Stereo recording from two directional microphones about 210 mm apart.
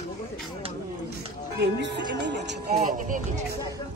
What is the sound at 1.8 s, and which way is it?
Speech, 55° right (ahead or behind).